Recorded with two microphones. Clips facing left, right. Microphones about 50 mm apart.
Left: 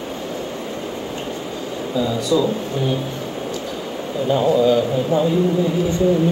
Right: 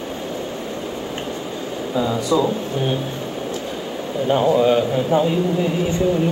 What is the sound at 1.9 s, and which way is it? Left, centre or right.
Speech, right.